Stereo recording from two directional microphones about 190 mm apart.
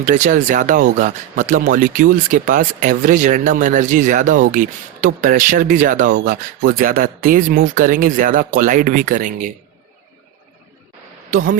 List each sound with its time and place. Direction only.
0.0 s speech: 40° right (ahead or behind)